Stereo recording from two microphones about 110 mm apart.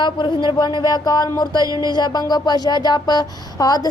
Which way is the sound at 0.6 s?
40° left (ahead or behind).